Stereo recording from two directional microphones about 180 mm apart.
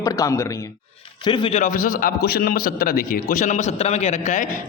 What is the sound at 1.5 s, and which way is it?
A man's voice, 45° left (ahead or behind).